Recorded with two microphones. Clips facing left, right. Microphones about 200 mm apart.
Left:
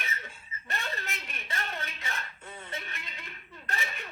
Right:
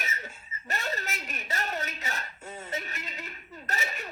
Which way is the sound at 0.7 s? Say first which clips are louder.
Right 3 dB; 40° right (ahead or behind).